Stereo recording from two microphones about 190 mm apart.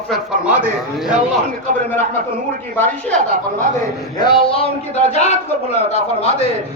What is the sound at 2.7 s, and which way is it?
Speech, 5° left (ahead or behind).